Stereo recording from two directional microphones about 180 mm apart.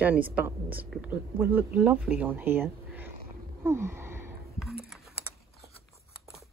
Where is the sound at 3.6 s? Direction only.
15° right (ahead or behind).